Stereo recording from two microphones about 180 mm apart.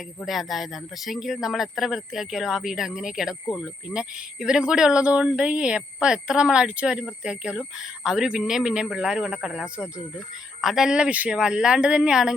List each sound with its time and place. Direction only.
0.3 s speech: centre (ahead or behind)